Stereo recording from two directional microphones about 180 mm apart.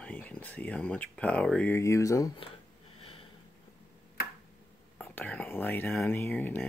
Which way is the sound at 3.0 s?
30° left (ahead or behind).